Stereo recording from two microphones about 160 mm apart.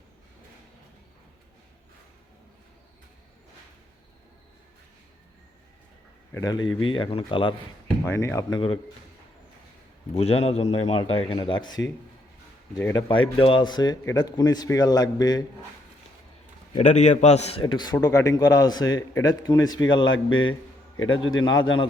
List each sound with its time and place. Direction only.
6.3 s a man's voice: 25° left (ahead or behind)
8.0 s speech: 15° left (ahead or behind)
10.2 s a man's voice: 40° left (ahead or behind)
12.8 s speech: 20° left (ahead or behind)
13.1 s speech: 30° left (ahead or behind)
16.7 s a man's voice: 45° left (ahead or behind); by 20.1 s 25° left (ahead or behind)
21.2 s speech: 30° left (ahead or behind)